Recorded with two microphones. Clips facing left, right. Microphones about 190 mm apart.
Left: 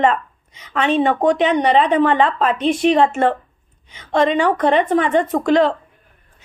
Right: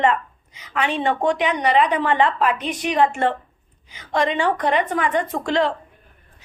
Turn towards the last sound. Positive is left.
turn(degrees=20)  # may be behind; listen again after turning